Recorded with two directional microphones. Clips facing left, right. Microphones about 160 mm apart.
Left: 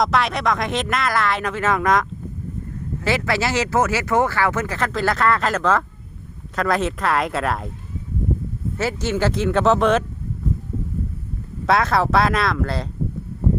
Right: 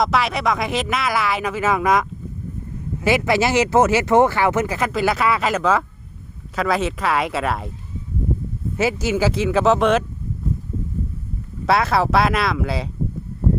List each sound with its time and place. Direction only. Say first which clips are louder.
0.0 s speech: even; 5° right (ahead or behind)
8.8 s speech: right 2 dB; 10° right (ahead or behind)
11.6 s speech: even; 5° right (ahead or behind)